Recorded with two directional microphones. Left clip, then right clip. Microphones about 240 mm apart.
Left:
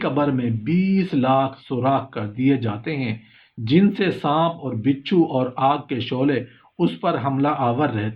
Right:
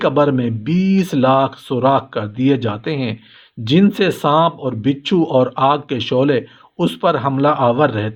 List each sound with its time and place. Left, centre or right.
0.0 s speech: right